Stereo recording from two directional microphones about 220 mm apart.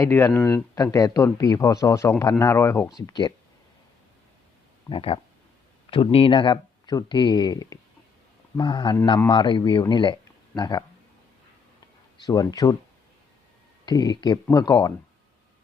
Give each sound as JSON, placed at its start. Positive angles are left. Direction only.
{"t": 0.0, "sound": "speech", "side_deg": 15}
{"t": 4.9, "sound": "a man's voice", "side_deg": 25}
{"t": 12.2, "sound": "speech", "side_deg": 15}
{"t": 13.8, "sound": "a man's voice", "side_deg": 20}